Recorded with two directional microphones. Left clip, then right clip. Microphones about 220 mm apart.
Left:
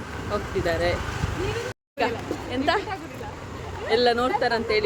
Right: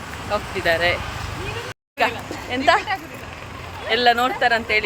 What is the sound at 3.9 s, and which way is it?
Speech, 5° right (ahead or behind).